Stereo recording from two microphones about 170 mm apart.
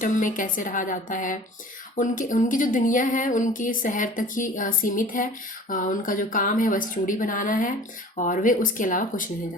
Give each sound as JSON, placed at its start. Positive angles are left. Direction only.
{"t": 0.0, "sound": "a woman's voice", "side_deg": 50}